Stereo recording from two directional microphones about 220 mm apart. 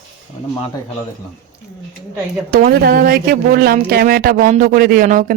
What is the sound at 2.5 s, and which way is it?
Speech, 40° right (ahead or behind).